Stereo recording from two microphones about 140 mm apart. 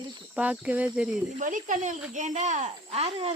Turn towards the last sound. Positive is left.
turn(degrees=-45)  # may be behind; listen again after turning